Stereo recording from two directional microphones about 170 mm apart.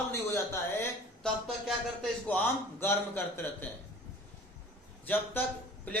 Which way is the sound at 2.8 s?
15° left (ahead or behind).